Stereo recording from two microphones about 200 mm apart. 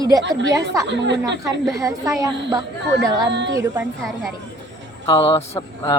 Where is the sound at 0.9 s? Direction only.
60° right (ahead or behind).